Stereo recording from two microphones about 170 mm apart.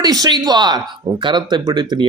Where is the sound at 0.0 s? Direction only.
25° right (ahead or behind).